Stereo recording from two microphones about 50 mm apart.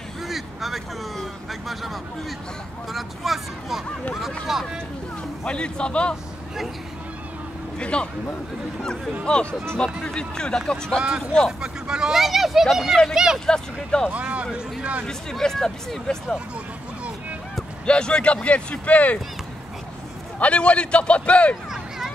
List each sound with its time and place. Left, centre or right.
0.2 s speech: centre
5.4 s speech: left
7.8 s speech: left
9.2 s speech: centre
11.0 s speech: centre
12.2 s speech: centre
13.5 s speech: centre
14.1 s a sound: right
15.0 s speech: centre
17.8 s speech: centre
20.3 s speech: left